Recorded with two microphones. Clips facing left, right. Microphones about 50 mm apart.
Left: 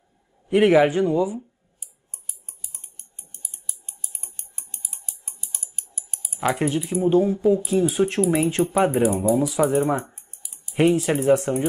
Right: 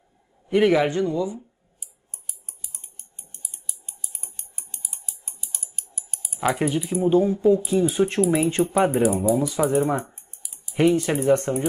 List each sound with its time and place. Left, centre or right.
0.5 s speech: centre
6.0 s typing: left
6.4 s speech: centre